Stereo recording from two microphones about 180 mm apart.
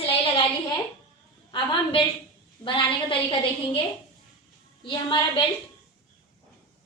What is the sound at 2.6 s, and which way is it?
Speech, 30° left (ahead or behind).